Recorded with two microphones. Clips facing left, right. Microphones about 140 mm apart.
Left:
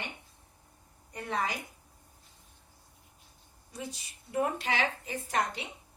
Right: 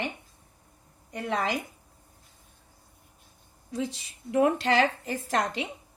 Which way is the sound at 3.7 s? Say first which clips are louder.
Right 9 dB; 90° right.